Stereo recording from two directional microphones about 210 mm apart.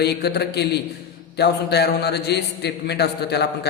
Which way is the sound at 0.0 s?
50° left (ahead or behind).